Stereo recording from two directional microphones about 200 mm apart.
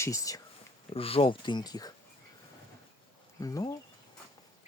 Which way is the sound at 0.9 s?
30° left (ahead or behind).